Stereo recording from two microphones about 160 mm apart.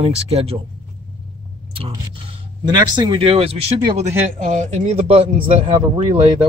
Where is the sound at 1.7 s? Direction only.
35° right (ahead or behind).